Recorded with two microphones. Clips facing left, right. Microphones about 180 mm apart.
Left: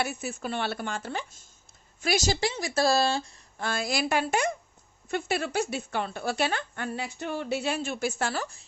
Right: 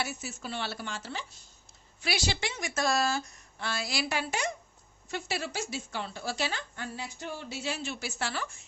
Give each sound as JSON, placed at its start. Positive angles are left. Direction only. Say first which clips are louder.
{"t": 0.0, "sound": "a woman's voice", "louder": "left 5 dB", "side_deg": 55}
{"t": 3.6, "sound": "a woman's voice", "louder": "left 5 dB", "side_deg": 50}